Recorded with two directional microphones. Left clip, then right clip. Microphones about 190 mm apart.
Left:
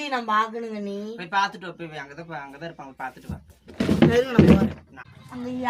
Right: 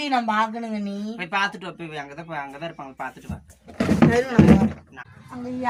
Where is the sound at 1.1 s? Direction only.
25° right (ahead or behind).